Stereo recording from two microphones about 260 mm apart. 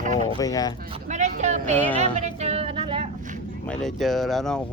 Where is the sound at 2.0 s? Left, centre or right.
Right.